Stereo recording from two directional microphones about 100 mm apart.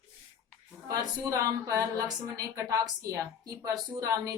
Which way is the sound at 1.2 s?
35° right (ahead or behind).